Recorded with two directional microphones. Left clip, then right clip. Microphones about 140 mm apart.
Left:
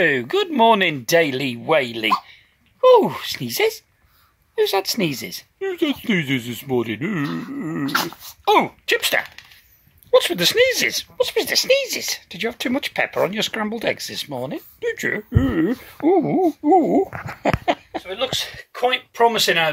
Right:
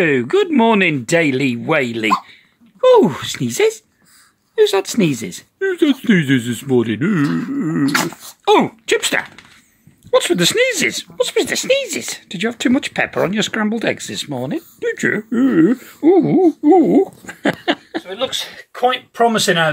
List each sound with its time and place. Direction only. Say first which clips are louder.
0.0 s speech: right 4 dB; 10° left (ahead or behind)
7.9 s speech: right 4 dB; 20° right (ahead or behind)
8.2 s speech: right 3 dB; centre (ahead or behind)
15.7 s speech: right 5 dB; 20° left (ahead or behind)